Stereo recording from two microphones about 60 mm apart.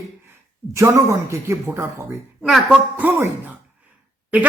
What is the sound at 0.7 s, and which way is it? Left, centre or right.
Speech, right.